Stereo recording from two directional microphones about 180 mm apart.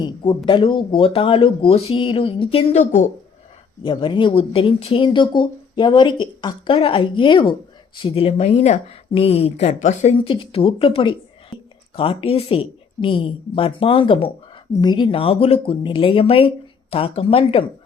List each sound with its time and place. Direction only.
0.0 s speech: 25° left (ahead or behind); by 3.1 s 40° left (ahead or behind)
3.8 s speech: 25° left (ahead or behind)